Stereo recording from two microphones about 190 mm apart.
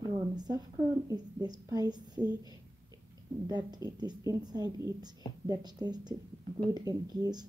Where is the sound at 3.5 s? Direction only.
20° right (ahead or behind).